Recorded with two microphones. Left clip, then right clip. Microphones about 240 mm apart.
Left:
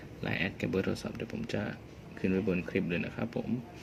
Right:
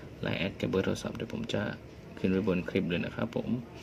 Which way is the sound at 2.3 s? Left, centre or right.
Centre.